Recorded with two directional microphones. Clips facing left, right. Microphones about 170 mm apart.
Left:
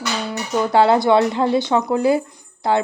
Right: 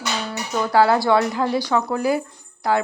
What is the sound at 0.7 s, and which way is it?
A woman's voice, 25° left (ahead or behind).